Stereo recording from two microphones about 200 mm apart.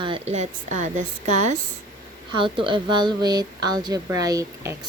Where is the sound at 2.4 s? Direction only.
25° right (ahead or behind).